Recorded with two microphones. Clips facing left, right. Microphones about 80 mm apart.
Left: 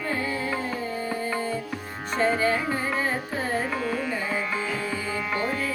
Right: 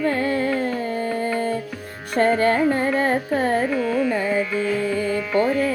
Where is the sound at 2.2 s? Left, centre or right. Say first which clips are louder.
Right 6 dB; right.